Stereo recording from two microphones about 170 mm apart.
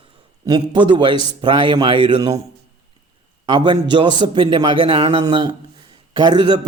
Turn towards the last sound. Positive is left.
turn(degrees=-25)  # may be behind; listen again after turning